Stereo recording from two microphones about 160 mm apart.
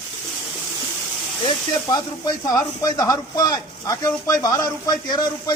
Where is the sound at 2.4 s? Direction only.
25° left (ahead or behind).